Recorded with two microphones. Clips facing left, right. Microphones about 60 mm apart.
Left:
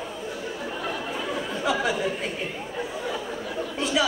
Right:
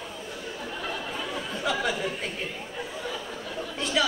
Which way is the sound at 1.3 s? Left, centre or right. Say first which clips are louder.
Left 3 dB; centre.